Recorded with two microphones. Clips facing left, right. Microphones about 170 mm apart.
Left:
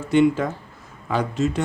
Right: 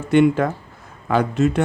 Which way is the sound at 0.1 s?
60° right (ahead or behind).